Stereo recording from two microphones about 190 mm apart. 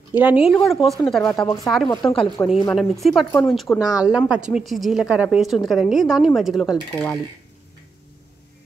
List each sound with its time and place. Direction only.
0.1 s speech: 10° right (ahead or behind)
0.8 s speech: 25° left (ahead or behind)
1.1 s speech: 5° left (ahead or behind)
1.9 s a woman's voice: 15° left (ahead or behind)
2.7 s speech: centre (ahead or behind)
3.3 s a woman's voice: 10° left (ahead or behind)
3.5 s speech: centre (ahead or behind)